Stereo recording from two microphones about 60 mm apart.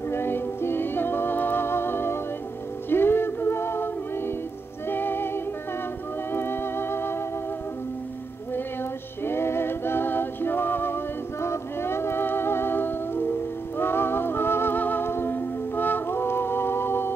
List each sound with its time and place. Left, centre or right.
0.1 s music: left
9.2 s music: left